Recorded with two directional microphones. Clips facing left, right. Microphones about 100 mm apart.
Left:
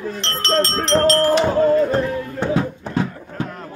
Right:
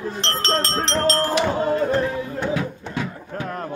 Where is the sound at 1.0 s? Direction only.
25° right (ahead or behind).